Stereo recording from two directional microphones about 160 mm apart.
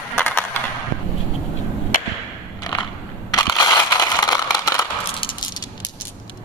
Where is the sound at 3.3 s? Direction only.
25° left (ahead or behind).